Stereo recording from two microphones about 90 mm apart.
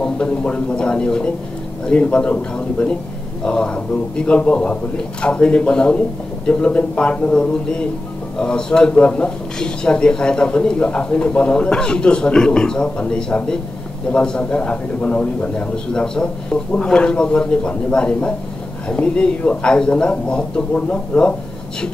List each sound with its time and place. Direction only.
0.0 s a man's voice: 10° left (ahead or behind)